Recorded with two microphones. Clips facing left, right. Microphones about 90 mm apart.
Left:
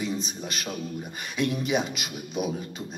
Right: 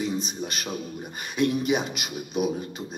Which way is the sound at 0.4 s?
5° right (ahead or behind).